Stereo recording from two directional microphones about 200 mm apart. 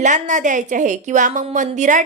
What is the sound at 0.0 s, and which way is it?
A woman's voice, 40° right (ahead or behind).